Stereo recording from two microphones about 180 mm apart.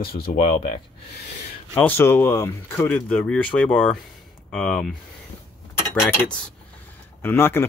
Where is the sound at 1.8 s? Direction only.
10° left (ahead or behind).